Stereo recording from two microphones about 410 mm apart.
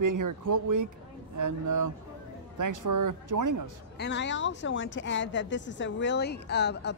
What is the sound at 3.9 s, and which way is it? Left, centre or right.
A woman's voice, left.